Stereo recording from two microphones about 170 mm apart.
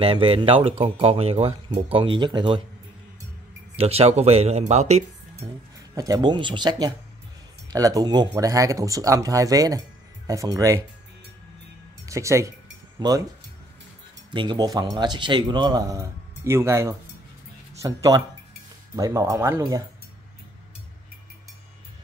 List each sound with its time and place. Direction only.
0.0 s speech: 30° right (ahead or behind)
3.7 s speech: 35° right (ahead or behind)
5.9 s speech: 20° right (ahead or behind)
12.1 s speech: 15° right (ahead or behind)
14.3 s speech: 30° right (ahead or behind)